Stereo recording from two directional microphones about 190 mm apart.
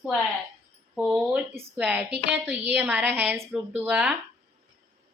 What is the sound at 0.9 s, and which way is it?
A woman's voice, 5° right (ahead or behind).